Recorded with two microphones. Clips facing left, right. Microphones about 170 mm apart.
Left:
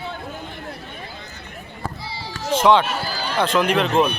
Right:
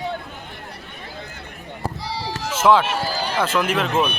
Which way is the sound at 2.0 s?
75° right (ahead or behind).